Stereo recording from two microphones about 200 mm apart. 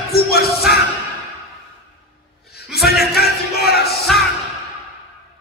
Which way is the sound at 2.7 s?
50° left (ahead or behind).